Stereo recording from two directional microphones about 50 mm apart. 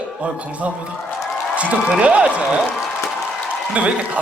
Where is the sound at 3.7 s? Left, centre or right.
Right.